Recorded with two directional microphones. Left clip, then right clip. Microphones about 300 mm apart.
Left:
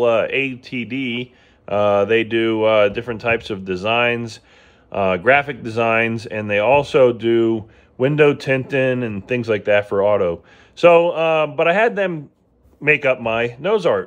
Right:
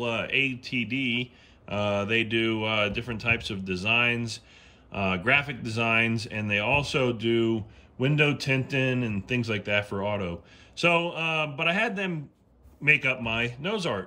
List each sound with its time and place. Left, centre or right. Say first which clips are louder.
0.0 s speech: left 10 dB; centre